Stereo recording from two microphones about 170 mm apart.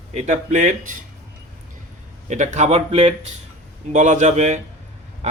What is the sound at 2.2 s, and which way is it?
Speech, 45° right (ahead or behind).